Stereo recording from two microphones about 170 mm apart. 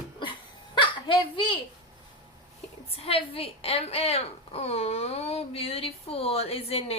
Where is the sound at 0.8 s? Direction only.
30° left (ahead or behind).